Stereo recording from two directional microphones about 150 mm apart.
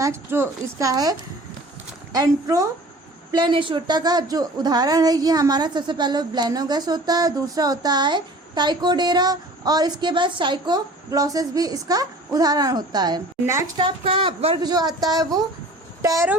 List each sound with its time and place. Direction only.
0.0 s a woman's voice: 15° right (ahead or behind)
2.1 s a woman's voice: 25° right (ahead or behind)
13.7 s a woman's voice: 35° right (ahead or behind)